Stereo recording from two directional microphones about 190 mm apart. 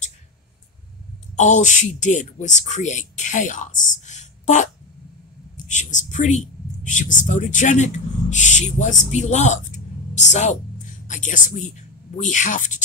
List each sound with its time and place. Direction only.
1.3 s speech: 40° left (ahead or behind)
5.7 s speech: 40° left (ahead or behind)